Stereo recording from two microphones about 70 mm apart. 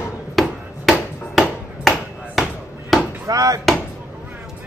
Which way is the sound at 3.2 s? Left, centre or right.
Right.